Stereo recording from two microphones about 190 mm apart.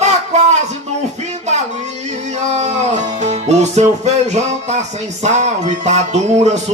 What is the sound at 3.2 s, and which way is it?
Music, 35° right (ahead or behind).